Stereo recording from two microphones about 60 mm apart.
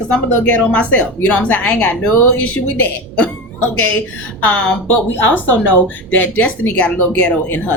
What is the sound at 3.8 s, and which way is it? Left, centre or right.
Speech, left.